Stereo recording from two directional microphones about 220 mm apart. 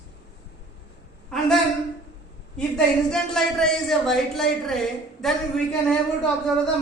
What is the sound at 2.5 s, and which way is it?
A woman's voice, centre (ahead or behind).